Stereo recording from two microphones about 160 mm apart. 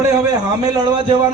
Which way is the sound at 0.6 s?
25° right (ahead or behind).